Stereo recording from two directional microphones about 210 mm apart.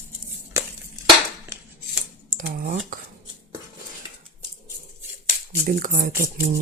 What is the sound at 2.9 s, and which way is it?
Cutlery, 40° right (ahead or behind).